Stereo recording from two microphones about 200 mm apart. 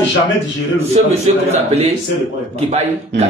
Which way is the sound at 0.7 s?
35° right (ahead or behind).